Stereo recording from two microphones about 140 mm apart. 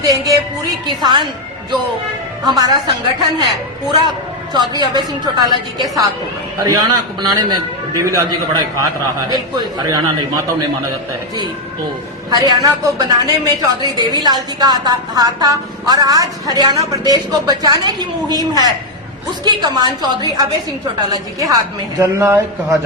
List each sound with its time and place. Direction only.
0.0 s music: 25° right (ahead or behind)
2.5 s a woman's voice: 30° right (ahead or behind)
7.2 s a woman's voice: 30° right (ahead or behind)
12.3 s a woman's voice: 30° right (ahead or behind)